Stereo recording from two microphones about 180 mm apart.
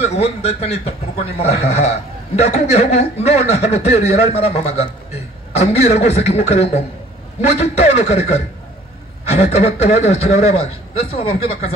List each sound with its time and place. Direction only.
0.0 s speech: 35° left (ahead or behind)
6.0 s speech: 65° left (ahead or behind)
6.3 s speech: 35° left (ahead or behind)